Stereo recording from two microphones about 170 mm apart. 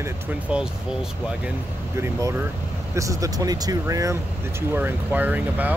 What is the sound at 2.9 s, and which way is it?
Speech, 20° right (ahead or behind).